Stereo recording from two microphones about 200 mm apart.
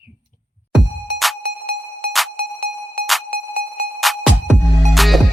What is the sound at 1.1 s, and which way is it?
Music, centre (ahead or behind).